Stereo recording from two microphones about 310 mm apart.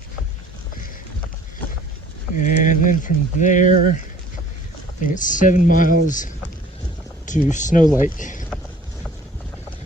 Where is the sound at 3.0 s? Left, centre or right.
Left.